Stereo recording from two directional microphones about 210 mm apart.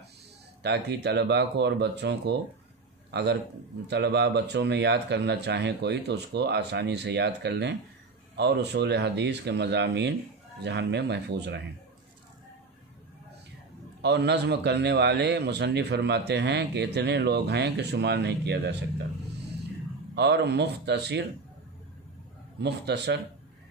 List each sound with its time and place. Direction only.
0.6 s a man's voice: 55° right (ahead or behind)
14.0 s a man's voice: 55° right (ahead or behind)
20.2 s a man's voice: 55° right (ahead or behind)
22.6 s a man's voice: 55° right (ahead or behind)